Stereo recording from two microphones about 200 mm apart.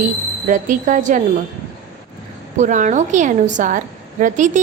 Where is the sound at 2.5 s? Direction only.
40° right (ahead or behind).